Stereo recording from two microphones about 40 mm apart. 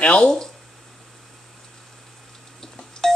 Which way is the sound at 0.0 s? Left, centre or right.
Left.